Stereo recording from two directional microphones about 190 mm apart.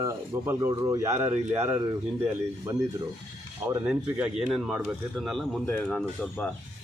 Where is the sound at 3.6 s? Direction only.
10° right (ahead or behind); by 6.5 s 5° left (ahead or behind).